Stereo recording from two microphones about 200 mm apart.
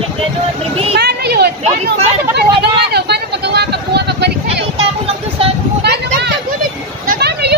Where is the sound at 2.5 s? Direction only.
55° right (ahead or behind).